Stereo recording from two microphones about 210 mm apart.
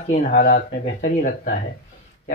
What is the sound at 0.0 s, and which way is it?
Speech, 40° left (ahead or behind).